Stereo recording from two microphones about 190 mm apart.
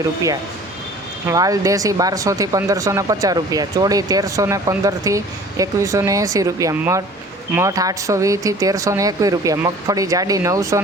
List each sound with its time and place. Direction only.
1.3 s speech: 20° right (ahead or behind)